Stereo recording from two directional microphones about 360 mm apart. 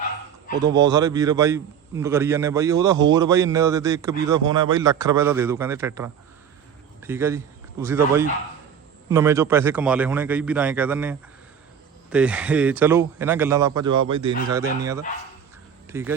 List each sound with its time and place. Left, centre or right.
0.5 s speech: right
0.8 s a man's voice: centre
15.9 s speech: centre